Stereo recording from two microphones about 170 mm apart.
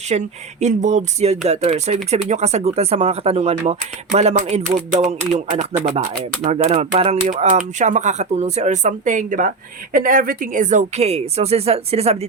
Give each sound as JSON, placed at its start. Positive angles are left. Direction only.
{"t": 0.1, "sound": "speech", "side_deg": -40}